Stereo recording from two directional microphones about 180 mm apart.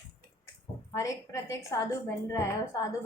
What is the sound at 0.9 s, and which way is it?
Speech, 15° left (ahead or behind).